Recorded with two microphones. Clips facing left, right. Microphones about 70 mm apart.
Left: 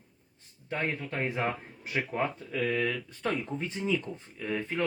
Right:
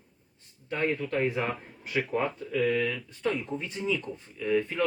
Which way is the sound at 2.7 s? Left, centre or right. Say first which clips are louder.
Right 2 dB; left.